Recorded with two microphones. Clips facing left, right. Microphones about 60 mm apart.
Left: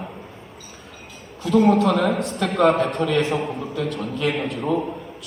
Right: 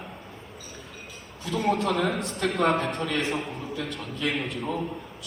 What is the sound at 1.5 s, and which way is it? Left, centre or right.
A man's voice, left.